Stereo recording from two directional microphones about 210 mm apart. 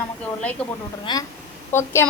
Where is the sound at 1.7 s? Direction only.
10° left (ahead or behind).